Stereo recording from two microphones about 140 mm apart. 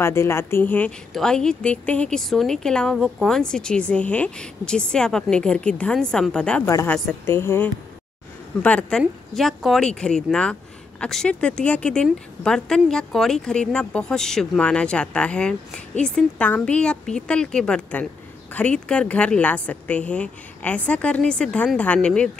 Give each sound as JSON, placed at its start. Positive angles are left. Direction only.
{"t": 0.0, "sound": "a woman's voice", "side_deg": 20}
{"t": 6.6, "sound": "a woman's voice", "side_deg": 25}